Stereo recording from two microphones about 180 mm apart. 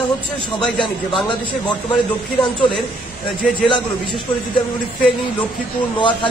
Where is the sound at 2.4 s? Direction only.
25° left (ahead or behind).